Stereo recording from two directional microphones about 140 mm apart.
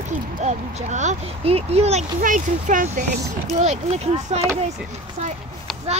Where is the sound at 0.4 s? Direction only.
55° right (ahead or behind).